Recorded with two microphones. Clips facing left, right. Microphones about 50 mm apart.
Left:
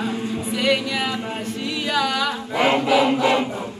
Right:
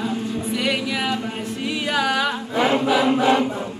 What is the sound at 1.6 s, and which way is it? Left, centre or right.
A capella, centre.